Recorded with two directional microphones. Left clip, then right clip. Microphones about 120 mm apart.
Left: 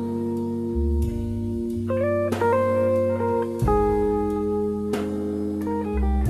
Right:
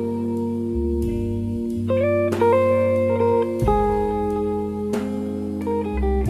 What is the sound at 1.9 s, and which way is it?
Music, 30° right (ahead or behind).